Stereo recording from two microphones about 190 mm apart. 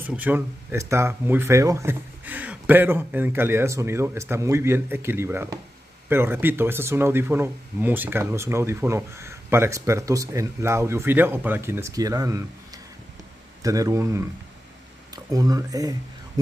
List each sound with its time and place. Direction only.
0.0 s speech: 10° right (ahead or behind)
15.3 s speech: 20° right (ahead or behind)